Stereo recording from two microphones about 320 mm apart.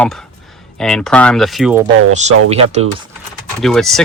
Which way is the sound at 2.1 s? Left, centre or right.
Right.